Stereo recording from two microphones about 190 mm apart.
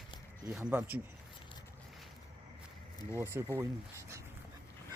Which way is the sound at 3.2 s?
15° right (ahead or behind).